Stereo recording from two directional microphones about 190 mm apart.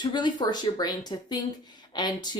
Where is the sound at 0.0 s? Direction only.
25° left (ahead or behind).